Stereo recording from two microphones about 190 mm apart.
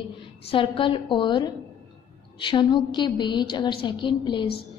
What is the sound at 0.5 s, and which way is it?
A woman's voice, 25° left (ahead or behind).